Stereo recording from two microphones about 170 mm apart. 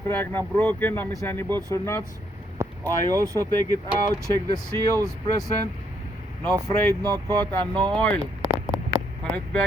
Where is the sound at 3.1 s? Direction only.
20° right (ahead or behind).